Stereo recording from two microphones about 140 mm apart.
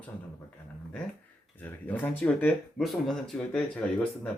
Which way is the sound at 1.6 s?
10° left (ahead or behind).